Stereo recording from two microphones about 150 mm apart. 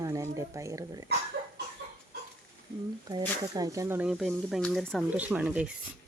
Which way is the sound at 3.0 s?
25° right (ahead or behind).